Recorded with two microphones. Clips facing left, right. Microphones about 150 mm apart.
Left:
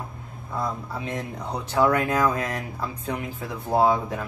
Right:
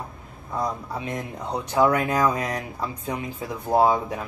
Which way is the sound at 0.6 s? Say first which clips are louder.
Right 1 dB; 15° right (ahead or behind).